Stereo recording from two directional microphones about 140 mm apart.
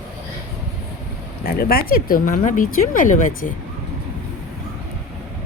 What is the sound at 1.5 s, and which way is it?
Speech, 90° left.